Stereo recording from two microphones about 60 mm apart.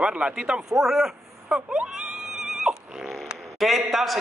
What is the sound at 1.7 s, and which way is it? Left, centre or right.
Speech, centre.